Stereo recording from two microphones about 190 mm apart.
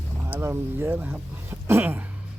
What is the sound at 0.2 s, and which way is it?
Speech, 10° right (ahead or behind).